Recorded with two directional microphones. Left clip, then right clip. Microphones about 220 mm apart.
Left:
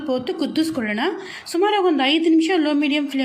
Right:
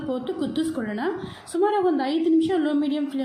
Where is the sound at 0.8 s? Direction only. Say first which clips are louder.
Left 5 dB; 50° left (ahead or behind).